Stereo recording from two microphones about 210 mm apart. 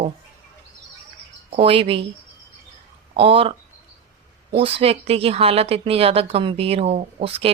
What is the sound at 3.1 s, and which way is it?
Speech, 25° right (ahead or behind).